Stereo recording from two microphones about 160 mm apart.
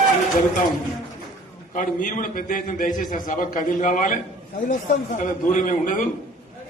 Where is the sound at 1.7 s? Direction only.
55° left (ahead or behind).